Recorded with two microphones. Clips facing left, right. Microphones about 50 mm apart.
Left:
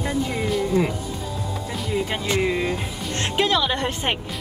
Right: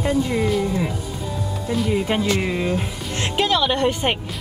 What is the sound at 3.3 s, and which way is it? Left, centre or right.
Music, centre.